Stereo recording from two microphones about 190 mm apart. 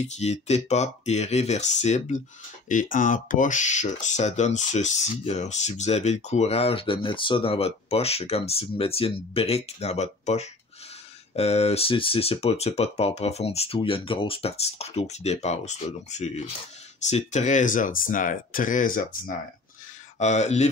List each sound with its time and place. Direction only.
0.0 s speech: 35° left (ahead or behind)